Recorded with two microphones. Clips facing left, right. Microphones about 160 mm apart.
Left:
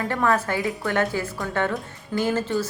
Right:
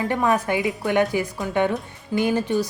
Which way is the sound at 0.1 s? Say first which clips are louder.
Right 1 dB; 15° right (ahead or behind).